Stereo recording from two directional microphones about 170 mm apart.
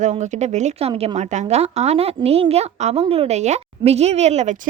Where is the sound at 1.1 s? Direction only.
40° right (ahead or behind).